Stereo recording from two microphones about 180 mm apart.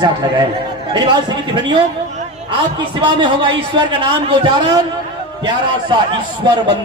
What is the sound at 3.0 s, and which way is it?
A man's voice, 25° right (ahead or behind).